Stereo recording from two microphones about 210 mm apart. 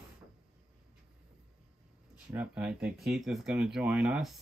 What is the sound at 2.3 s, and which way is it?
Speech, 5° right (ahead or behind).